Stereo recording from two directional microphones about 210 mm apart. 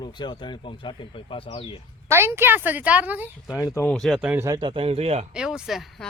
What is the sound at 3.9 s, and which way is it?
Speech, centre (ahead or behind).